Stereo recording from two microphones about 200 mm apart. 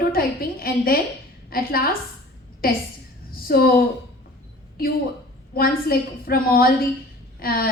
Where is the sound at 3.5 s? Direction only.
50° left (ahead or behind).